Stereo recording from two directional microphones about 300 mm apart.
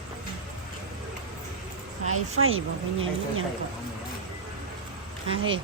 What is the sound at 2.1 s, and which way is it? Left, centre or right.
Speech, right.